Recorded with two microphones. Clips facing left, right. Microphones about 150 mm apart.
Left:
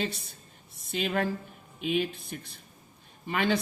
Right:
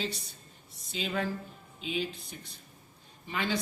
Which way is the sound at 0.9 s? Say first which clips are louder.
Left 4 dB; 60° left (ahead or behind).